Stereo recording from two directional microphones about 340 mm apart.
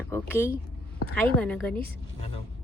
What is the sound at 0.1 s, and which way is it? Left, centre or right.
A woman's voice, centre.